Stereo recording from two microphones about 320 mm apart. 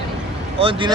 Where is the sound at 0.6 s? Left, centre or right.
Centre.